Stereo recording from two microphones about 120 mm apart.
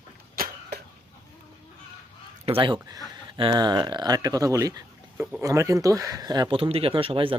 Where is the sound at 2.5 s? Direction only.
45° right (ahead or behind).